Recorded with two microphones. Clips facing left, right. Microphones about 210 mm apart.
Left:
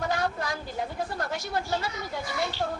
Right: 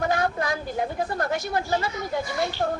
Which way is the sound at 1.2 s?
55° right (ahead or behind).